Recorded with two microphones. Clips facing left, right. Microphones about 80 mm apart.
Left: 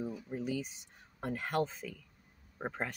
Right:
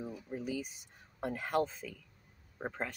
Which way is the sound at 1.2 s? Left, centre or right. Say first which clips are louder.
Right 1 dB; centre.